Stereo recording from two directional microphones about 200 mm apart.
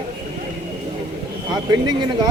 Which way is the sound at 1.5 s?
20° right (ahead or behind).